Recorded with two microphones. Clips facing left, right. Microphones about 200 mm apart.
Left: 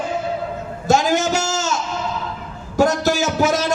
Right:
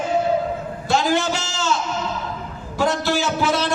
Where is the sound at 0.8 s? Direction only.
45° left (ahead or behind).